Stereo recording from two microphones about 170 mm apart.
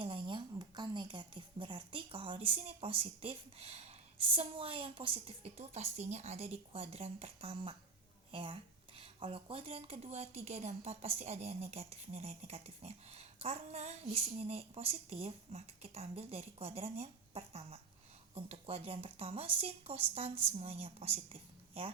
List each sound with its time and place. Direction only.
0.0 s a woman's voice: 30° right (ahead or behind)